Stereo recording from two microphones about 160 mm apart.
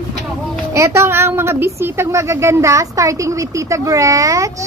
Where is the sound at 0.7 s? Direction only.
15° right (ahead or behind).